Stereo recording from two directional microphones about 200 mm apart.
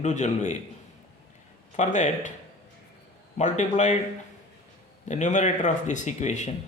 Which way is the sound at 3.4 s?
35° left (ahead or behind).